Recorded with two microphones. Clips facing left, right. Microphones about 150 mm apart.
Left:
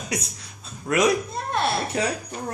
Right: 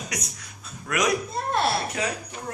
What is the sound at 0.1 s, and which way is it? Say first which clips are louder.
Speech: left 5 dB; 30° left (ahead or behind).